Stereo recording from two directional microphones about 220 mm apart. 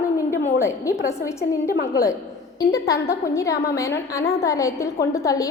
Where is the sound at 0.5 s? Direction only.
15° left (ahead or behind).